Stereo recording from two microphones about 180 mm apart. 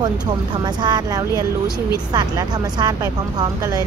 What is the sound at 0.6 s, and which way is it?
Speech, 25° right (ahead or behind).